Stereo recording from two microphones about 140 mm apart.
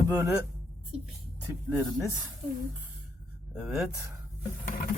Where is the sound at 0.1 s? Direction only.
10° right (ahead or behind).